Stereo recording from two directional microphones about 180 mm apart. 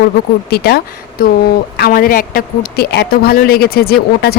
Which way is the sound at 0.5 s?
60° left (ahead or behind).